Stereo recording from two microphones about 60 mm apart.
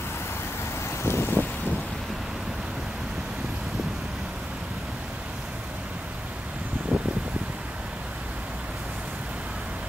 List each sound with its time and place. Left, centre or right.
1.0 s vehicle: left
6.9 s mechanical fan: centre